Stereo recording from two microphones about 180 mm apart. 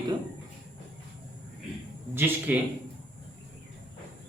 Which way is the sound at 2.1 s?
10° right (ahead or behind).